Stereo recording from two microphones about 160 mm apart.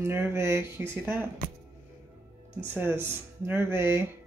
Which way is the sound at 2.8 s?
15° right (ahead or behind).